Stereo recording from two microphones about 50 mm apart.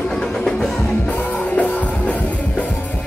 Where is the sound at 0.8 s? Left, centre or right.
Left.